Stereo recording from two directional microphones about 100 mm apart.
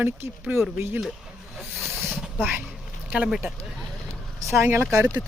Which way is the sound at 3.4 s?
Centre (ahead or behind).